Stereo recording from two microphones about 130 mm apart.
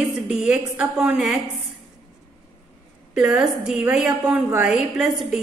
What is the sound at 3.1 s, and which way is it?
A woman's voice, 5° right (ahead or behind).